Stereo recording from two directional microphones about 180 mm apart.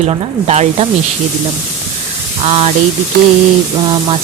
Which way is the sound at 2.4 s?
30° right (ahead or behind).